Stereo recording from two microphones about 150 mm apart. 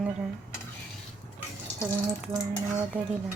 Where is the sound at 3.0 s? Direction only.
10° right (ahead or behind).